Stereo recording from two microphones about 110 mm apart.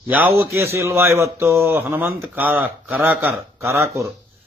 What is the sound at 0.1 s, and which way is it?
A man's voice, 15° right (ahead or behind).